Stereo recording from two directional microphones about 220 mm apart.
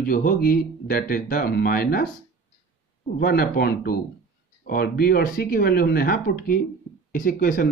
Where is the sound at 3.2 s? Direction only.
45° left (ahead or behind).